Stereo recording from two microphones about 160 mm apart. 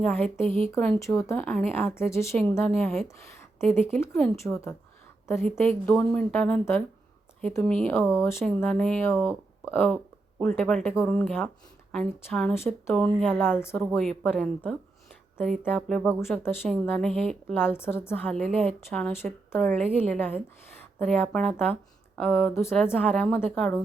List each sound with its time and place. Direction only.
0.0 s a woman's voice: 10° left (ahead or behind)
0.4 s speech: 35° right (ahead or behind)
0.7 s a woman's voice: 15° left (ahead or behind)
5.8 s a woman's voice: 10° left (ahead or behind)